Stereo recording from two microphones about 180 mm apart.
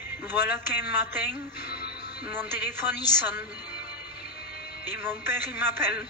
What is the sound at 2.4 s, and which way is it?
A man's voice, 10° right (ahead or behind).